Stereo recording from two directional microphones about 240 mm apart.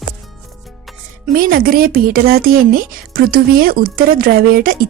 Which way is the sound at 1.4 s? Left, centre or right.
Right.